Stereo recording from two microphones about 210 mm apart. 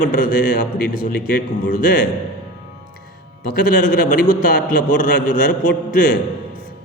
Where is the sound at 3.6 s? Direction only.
40° left (ahead or behind).